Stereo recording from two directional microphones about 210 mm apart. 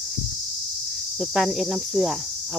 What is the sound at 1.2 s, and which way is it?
Cricket, centre (ahead or behind).